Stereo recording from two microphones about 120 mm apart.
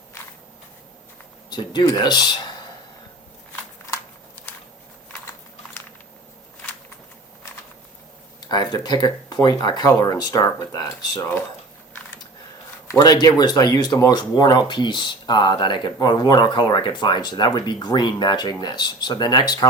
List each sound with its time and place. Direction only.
1.5 s speech: 35° left (ahead or behind)
8.4 s speech: 35° left (ahead or behind)
12.9 s speech: 30° left (ahead or behind)